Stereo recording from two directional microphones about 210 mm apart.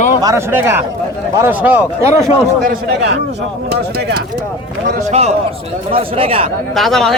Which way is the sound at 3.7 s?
50° right (ahead or behind).